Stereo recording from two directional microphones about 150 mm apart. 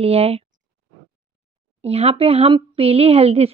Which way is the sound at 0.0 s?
40° right (ahead or behind).